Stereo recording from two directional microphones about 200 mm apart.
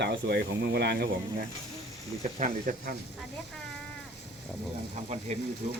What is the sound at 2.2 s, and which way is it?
Speech, 40° right (ahead or behind).